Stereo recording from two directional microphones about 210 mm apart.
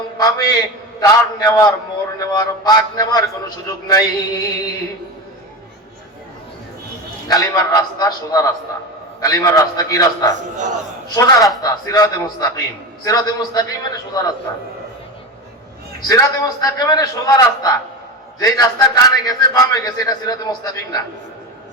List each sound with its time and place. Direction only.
0.2 s a man's voice: 20° left (ahead or behind)
7.3 s a man's voice: 15° left (ahead or behind)
16.0 s a man's voice: 15° left (ahead or behind)